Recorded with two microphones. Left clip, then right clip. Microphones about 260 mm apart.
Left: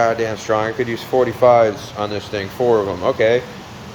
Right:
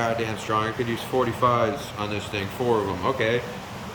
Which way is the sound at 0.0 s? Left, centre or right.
Centre.